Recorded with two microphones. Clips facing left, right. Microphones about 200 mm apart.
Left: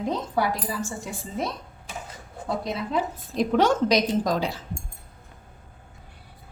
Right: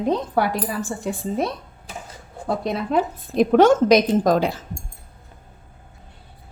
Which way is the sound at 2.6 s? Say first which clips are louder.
Right 7 dB; 60° right (ahead or behind).